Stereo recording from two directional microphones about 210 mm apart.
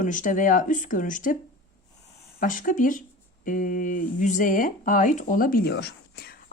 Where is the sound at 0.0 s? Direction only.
40° left (ahead or behind).